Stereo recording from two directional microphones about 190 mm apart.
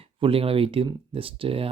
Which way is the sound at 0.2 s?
30° right (ahead or behind).